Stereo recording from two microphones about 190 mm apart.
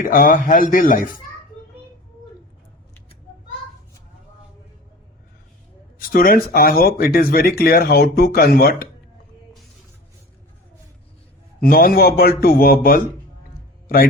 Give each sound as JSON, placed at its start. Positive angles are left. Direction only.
{"t": 0.0, "sound": "speech", "side_deg": 45}
{"t": 6.1, "sound": "speech", "side_deg": 50}
{"t": 11.6, "sound": "a man's voice", "side_deg": 50}